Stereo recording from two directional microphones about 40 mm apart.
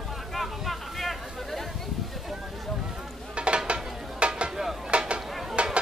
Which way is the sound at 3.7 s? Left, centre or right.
Right.